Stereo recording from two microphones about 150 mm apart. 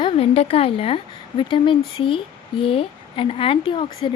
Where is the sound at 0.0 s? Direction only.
40° left (ahead or behind).